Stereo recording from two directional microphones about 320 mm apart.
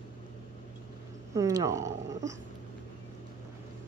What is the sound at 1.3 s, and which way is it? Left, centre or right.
Speech, centre.